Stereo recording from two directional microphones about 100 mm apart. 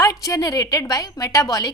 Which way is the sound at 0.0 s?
35° left (ahead or behind).